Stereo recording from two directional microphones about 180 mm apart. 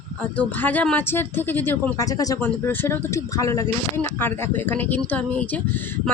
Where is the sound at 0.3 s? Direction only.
10° left (ahead or behind).